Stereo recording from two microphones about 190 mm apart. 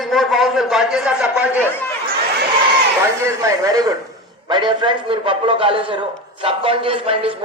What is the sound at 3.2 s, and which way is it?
A man's voice, 15° right (ahead or behind).